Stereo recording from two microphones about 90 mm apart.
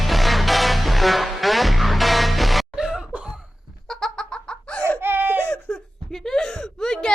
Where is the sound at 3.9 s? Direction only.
5° left (ahead or behind).